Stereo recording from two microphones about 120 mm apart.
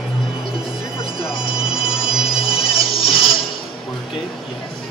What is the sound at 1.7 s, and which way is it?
Music, 5° right (ahead or behind).